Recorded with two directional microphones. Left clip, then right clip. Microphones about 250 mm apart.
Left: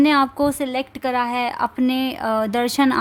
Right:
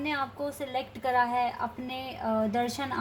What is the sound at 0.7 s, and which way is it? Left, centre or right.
Speech, left.